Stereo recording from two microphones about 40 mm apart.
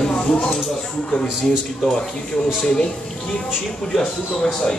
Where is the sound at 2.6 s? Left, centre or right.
Centre.